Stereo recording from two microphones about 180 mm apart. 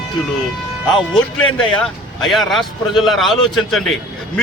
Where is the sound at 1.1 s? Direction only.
Centre (ahead or behind).